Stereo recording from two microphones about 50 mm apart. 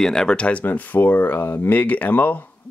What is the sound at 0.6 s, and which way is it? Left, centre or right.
Speech, left.